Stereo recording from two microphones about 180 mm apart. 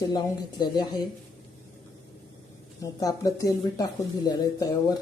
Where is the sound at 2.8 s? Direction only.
20° left (ahead or behind).